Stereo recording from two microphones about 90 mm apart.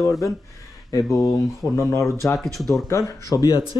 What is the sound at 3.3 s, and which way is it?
Speech, 45° left (ahead or behind).